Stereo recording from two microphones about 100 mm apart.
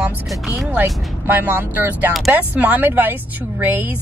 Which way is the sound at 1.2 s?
20° right (ahead or behind).